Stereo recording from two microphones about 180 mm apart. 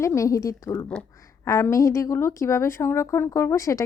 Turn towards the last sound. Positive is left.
turn(degrees=15)  # may be behind; listen again after turning